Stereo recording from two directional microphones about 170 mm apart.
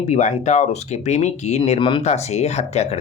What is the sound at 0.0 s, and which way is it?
Speech, 45° left (ahead or behind).